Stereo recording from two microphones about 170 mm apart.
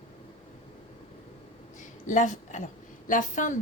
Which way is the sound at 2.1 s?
50° left (ahead or behind).